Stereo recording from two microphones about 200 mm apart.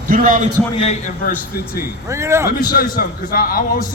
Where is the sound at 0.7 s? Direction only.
30° left (ahead or behind).